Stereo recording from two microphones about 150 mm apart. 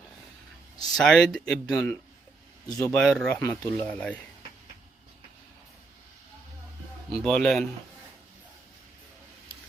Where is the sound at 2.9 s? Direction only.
5° left (ahead or behind).